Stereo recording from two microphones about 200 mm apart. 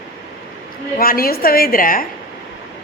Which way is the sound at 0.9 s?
45° left (ahead or behind).